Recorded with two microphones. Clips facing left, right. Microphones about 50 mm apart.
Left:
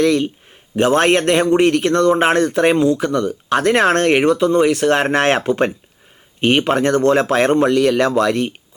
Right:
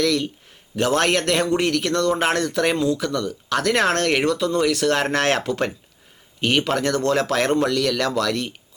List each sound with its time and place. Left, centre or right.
0.0 s speech: left